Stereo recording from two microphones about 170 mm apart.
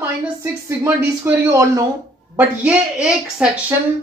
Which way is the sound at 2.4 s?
5° right (ahead or behind).